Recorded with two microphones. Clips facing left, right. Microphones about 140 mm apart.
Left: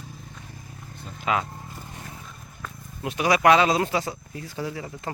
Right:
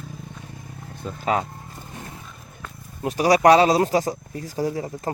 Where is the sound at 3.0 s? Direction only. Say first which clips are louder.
Right 5 dB; 35° right (ahead or behind).